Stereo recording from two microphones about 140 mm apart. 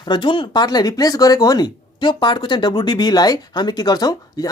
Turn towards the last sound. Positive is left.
turn(degrees=25)  # may be behind; listen again after turning